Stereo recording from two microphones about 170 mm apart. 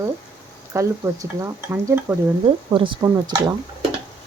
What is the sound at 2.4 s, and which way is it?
Speech, 30° right (ahead or behind).